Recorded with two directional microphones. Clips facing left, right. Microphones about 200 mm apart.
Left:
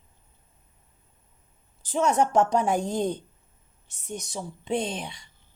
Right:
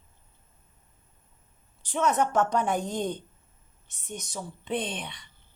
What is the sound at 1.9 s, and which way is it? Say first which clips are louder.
Speech: left 2 dB; 30° left (ahead or behind).